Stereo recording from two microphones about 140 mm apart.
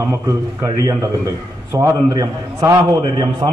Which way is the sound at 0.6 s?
25° right (ahead or behind).